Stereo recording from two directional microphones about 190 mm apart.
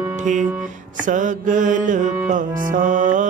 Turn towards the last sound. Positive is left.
turn(degrees=-40)  # may be behind; listen again after turning